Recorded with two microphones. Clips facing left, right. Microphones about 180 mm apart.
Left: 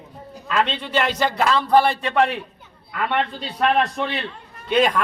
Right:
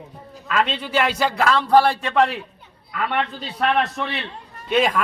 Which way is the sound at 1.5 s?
5° left (ahead or behind).